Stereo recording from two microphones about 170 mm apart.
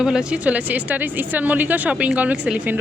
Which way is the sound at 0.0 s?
5° right (ahead or behind).